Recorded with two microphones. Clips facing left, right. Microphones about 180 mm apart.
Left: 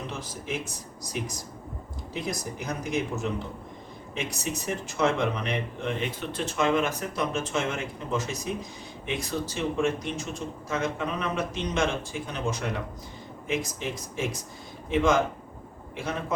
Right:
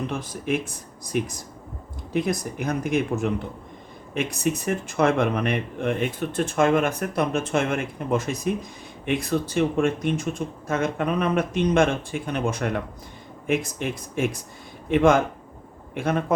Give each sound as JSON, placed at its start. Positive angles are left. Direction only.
{"t": 0.1, "sound": "speech", "side_deg": -55}